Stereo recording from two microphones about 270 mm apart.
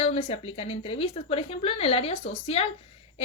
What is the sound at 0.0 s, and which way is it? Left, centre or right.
A woman's voice, left.